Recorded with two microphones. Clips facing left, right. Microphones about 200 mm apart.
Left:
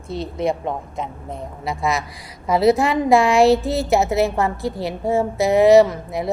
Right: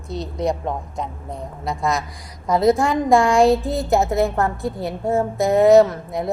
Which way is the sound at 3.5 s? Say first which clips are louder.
Left 1 dB; 75° left (ahead or behind).